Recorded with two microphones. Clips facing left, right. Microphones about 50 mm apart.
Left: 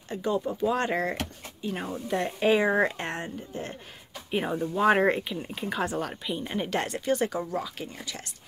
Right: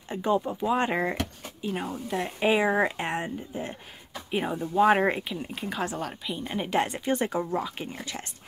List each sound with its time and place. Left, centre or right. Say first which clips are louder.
0.1 s speech: right 2 dB; right
4.3 s speech: left 1 dB; centre
6.7 s speech: right 5 dB; centre
7.1 s speech: even; right